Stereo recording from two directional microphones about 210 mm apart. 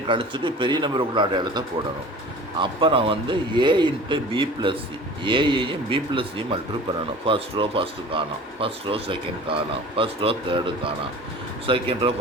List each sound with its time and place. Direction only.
0.1 s speech: 25° right (ahead or behind)